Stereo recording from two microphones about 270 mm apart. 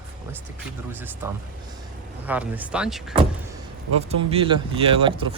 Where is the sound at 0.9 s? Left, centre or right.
Centre.